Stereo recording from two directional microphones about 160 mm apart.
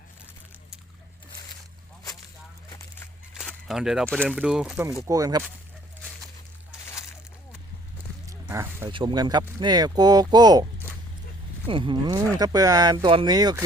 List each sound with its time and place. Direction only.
3.7 s speech: 5° right (ahead or behind)
5.0 s speech: 20° right (ahead or behind)
8.3 s a sound: 15° right (ahead or behind)
8.9 s speech: 30° right (ahead or behind)
11.7 s speech: 30° right (ahead or behind)